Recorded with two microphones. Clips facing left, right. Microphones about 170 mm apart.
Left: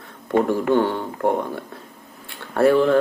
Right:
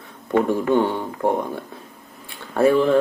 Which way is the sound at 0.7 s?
15° right (ahead or behind).